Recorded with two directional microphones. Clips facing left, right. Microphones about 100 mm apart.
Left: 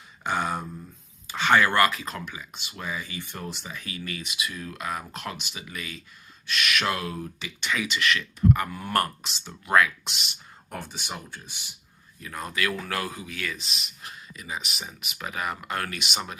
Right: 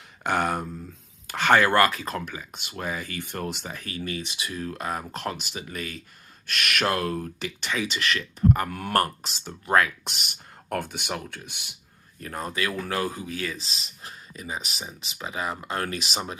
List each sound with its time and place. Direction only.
0.2 s speech: 60° right (ahead or behind)
3.9 s speech: 30° right (ahead or behind)
10.7 s speech: 55° right (ahead or behind)
12.2 s speech: 35° right (ahead or behind)
15.0 s speech: 25° right (ahead or behind)